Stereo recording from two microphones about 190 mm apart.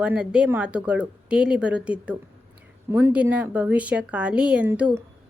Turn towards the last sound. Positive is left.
turn(degrees=-5)  # may be behind; listen again after turning